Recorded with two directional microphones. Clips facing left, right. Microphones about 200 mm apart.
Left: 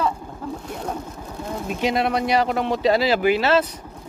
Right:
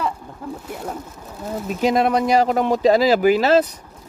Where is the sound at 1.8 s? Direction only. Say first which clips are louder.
Right 4 dB; 45° right (ahead or behind).